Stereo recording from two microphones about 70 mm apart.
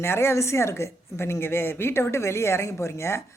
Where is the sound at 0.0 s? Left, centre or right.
Left.